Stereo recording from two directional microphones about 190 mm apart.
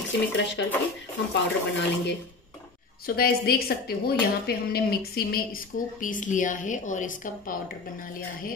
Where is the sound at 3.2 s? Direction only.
55° left (ahead or behind).